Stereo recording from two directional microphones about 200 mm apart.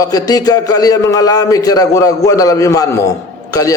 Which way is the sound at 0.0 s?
15° left (ahead or behind).